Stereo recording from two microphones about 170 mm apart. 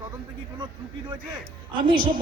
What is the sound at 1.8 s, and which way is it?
Speech, 30° right (ahead or behind).